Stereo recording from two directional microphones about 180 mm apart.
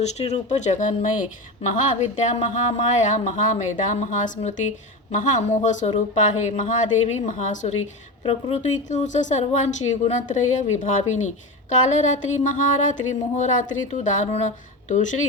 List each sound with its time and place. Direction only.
0.0 s speech: 40° left (ahead or behind)